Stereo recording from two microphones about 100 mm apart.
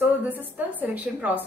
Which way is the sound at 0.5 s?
15° right (ahead or behind).